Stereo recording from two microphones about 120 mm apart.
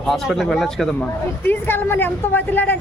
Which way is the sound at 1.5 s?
20° left (ahead or behind).